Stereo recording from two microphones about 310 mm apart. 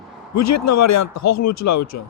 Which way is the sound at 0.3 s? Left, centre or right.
Left.